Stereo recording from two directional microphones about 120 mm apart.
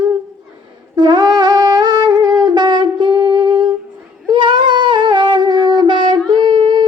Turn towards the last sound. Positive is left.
turn(degrees=-40)  # may be behind; listen again after turning